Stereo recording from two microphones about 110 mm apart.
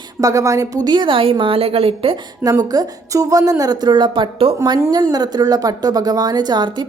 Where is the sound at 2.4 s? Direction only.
35° right (ahead or behind).